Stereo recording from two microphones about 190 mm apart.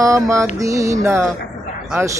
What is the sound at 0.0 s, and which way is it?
Mantra, 15° right (ahead or behind).